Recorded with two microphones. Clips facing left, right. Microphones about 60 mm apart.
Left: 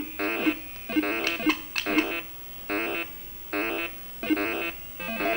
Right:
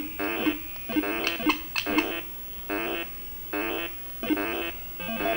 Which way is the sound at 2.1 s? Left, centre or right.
Left.